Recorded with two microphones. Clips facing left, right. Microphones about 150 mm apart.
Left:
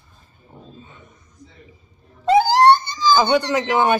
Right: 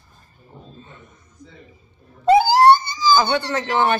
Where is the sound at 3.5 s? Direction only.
15° left (ahead or behind).